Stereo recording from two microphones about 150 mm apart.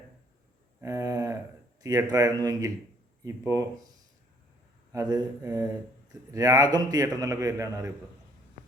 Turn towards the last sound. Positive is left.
turn(degrees=-20)  # may be behind; listen again after turning